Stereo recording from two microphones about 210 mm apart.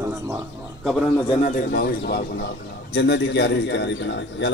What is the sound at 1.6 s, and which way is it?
A man's voice, 45° left (ahead or behind).